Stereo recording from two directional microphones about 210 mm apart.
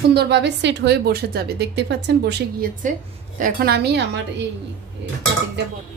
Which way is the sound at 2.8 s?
35° right (ahead or behind).